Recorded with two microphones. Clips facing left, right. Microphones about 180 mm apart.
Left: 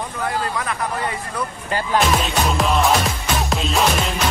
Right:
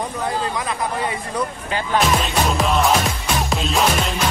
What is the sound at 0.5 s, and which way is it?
Speech, 10° right (ahead or behind).